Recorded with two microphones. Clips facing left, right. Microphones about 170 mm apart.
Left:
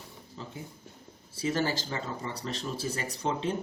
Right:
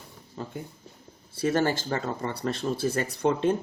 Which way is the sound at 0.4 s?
50° right (ahead or behind).